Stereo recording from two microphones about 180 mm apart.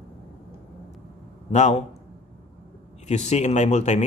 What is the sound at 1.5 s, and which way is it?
Speech, 40° left (ahead or behind).